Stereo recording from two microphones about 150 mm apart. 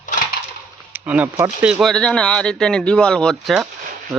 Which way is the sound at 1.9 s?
5° left (ahead or behind).